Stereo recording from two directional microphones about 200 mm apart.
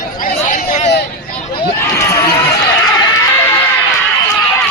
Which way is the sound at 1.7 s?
10° left (ahead or behind).